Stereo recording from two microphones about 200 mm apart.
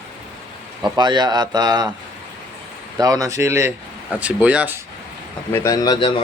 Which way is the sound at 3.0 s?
20° right (ahead or behind).